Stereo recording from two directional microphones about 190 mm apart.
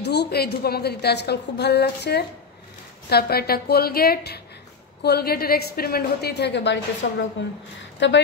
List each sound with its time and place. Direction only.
0.0 s a woman's voice: 60° left (ahead or behind)